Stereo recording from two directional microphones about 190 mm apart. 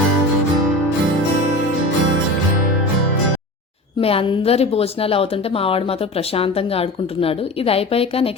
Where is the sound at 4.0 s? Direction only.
30° left (ahead or behind).